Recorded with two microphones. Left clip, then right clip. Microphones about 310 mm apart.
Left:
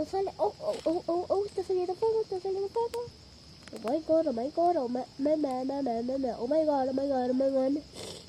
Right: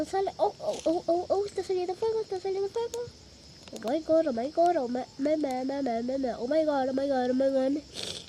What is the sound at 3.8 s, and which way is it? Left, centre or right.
Speech, right.